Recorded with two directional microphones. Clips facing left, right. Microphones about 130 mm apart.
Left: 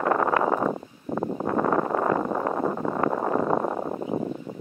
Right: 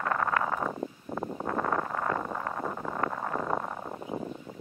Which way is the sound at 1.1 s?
45° left (ahead or behind).